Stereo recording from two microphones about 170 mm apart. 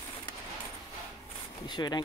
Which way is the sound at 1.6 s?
25° left (ahead or behind).